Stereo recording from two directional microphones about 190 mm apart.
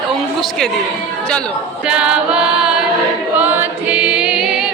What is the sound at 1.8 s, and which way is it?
Choir, 5° right (ahead or behind).